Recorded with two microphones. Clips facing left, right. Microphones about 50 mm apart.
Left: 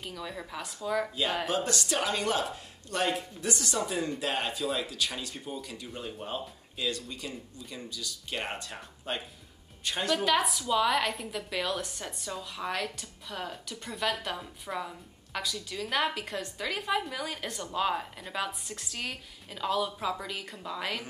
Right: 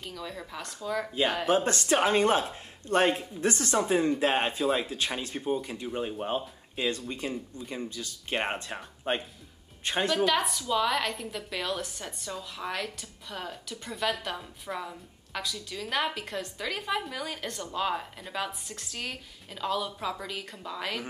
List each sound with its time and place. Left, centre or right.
0.0 s a woman's voice: centre
1.5 s speech: right
10.1 s a woman's voice: centre